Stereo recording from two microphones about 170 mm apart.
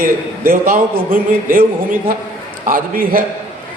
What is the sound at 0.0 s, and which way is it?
A man's voice, 60° right (ahead or behind).